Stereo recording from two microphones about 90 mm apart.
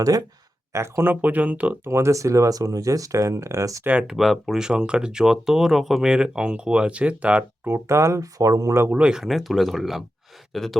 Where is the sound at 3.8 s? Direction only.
10° right (ahead or behind).